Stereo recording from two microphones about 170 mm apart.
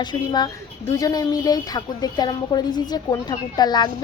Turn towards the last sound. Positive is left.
turn(degrees=25)  # may be behind; listen again after turning